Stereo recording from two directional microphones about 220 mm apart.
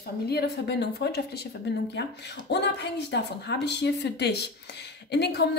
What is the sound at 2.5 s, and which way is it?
A woman's voice, 50° left (ahead or behind).